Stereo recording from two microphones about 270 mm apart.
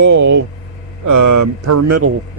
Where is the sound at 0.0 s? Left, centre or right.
Right.